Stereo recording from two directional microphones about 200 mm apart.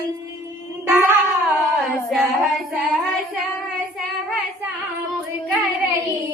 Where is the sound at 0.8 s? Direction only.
10° right (ahead or behind).